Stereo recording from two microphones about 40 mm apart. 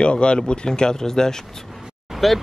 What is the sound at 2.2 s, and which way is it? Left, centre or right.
Speech, centre.